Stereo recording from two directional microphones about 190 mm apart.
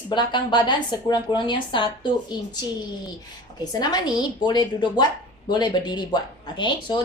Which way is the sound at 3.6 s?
20° left (ahead or behind).